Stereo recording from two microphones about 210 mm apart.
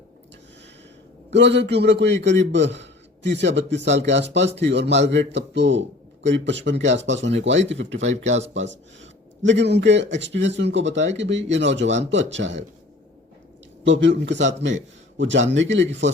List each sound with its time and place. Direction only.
1.3 s a man's voice: 55° right (ahead or behind)
7.9 s speech: 35° right (ahead or behind)
8.6 s a man's voice: 60° right (ahead or behind)
13.8 s a man's voice: 60° right (ahead or behind)